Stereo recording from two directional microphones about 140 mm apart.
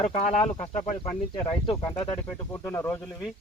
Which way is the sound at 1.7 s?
15° left (ahead or behind).